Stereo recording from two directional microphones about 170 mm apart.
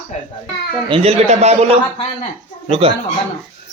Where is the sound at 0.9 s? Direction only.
35° right (ahead or behind).